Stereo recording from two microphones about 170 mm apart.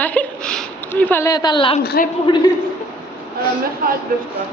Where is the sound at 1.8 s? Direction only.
65° left (ahead or behind).